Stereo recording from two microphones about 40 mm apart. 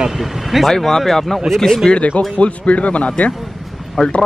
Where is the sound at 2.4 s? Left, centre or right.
Left.